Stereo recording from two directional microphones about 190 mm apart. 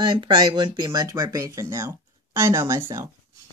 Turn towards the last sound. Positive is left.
turn(degrees=-15)  # may be behind; listen again after turning